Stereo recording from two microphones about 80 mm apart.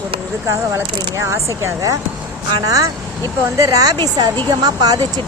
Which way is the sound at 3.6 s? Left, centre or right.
Right.